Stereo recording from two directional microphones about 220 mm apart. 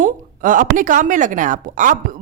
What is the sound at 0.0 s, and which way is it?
A woman's voice, 35° right (ahead or behind).